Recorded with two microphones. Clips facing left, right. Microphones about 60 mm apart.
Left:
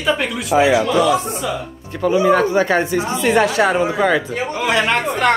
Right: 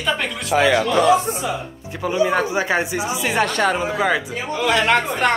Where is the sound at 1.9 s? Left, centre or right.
Centre.